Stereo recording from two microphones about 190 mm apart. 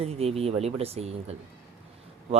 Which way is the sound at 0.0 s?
30° right (ahead or behind).